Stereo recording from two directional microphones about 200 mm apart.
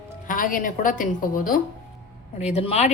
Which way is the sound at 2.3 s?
30° left (ahead or behind).